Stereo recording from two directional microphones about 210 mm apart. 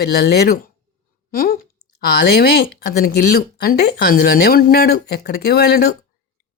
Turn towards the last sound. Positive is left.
turn(degrees=50)  # may be behind; listen again after turning